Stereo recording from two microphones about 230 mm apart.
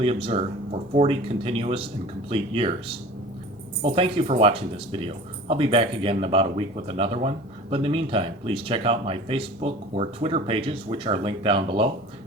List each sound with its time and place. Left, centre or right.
0.0 s speech: right